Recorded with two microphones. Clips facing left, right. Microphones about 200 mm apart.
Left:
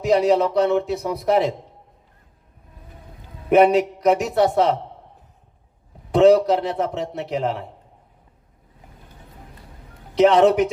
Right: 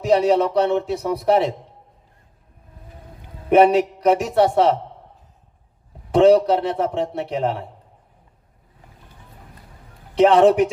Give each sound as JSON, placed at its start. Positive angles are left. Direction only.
{"t": 0.0, "sound": "a man's voice", "side_deg": -30}
{"t": 3.5, "sound": "a man's voice", "side_deg": -30}
{"t": 6.1, "sound": "a man's voice", "side_deg": -30}
{"t": 10.2, "sound": "a man's voice", "side_deg": -35}